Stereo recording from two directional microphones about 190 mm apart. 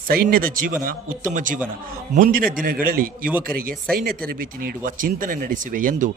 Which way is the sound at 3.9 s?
55° right (ahead or behind).